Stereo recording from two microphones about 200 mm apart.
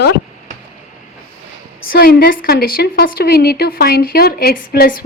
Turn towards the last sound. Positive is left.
turn(degrees=50)  # may be behind; listen again after turning